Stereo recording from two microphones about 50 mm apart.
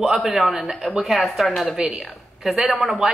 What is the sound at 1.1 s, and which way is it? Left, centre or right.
Speech, centre.